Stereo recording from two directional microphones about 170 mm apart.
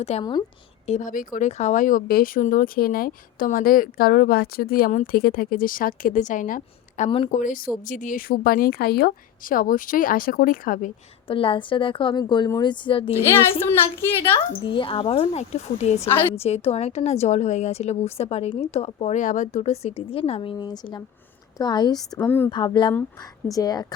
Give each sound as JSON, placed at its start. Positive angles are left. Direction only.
{"t": 0.0, "sound": "a woman's voice", "side_deg": 35}
{"t": 0.9, "sound": "speech", "side_deg": 45}
{"t": 11.3, "sound": "a woman's voice", "side_deg": 30}
{"t": 13.3, "sound": "a woman's voice", "side_deg": 15}
{"t": 14.6, "sound": "a woman's voice", "side_deg": 30}
{"t": 22.1, "sound": "a woman's voice", "side_deg": 10}
{"t": 22.4, "sound": "a woman's voice", "side_deg": 25}